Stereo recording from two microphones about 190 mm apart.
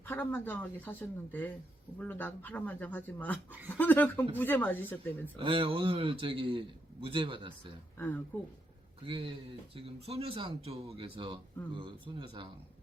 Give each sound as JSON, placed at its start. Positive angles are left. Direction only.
{"t": 0.0, "sound": "speech", "side_deg": 10}
{"t": 5.4, "sound": "a man's voice", "side_deg": -30}
{"t": 7.9, "sound": "speech", "side_deg": 10}
{"t": 9.0, "sound": "a man's voice", "side_deg": -30}